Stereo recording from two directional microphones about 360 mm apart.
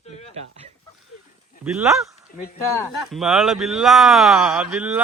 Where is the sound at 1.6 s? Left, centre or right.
Centre.